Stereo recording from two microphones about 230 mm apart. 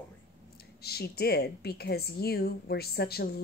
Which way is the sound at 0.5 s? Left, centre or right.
Left.